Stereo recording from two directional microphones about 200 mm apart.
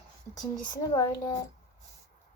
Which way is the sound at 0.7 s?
20° left (ahead or behind).